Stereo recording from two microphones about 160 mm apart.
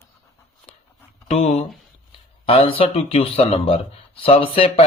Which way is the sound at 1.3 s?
40° left (ahead or behind).